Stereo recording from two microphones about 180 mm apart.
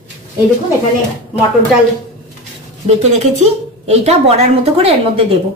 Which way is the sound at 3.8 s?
35° right (ahead or behind).